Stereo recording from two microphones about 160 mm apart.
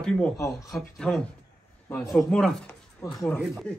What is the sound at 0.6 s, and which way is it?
Speech, centre (ahead or behind).